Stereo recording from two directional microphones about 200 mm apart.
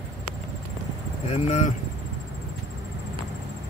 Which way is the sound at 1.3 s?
35° left (ahead or behind).